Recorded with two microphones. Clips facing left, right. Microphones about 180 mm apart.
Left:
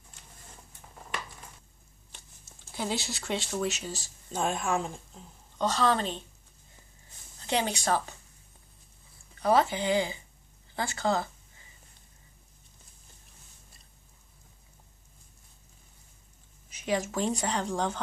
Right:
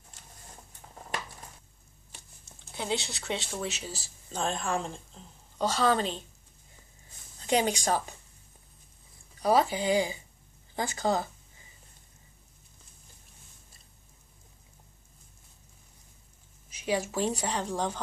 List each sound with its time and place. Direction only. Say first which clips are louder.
2.8 s speech: even; centre (ahead or behind)
4.3 s a woman's voice: left 2 dB; 10° left (ahead or behind)
5.6 s a woman's voice: even; 10° right (ahead or behind)
7.4 s a woman's voice: right 2 dB; 15° right (ahead or behind)
9.4 s a woman's voice: even; 10° right (ahead or behind)
16.8 s a woman's voice: even; 10° right (ahead or behind)